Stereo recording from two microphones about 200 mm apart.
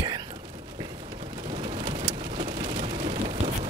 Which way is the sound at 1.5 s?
20° right (ahead or behind).